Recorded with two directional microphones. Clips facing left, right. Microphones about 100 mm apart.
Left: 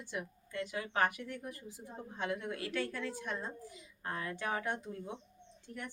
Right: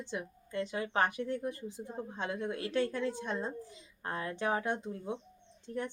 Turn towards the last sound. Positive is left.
turn(degrees=-25)  # may be behind; listen again after turning